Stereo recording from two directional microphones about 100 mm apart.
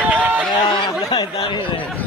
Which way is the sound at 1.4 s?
55° left (ahead or behind).